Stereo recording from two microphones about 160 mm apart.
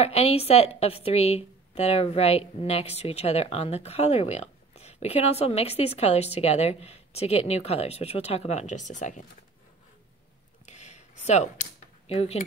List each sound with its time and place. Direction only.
0.0 s a woman's voice: 40° left (ahead or behind)
10.6 s a sound: 45° left (ahead or behind)
12.1 s a woman's voice: 40° left (ahead or behind)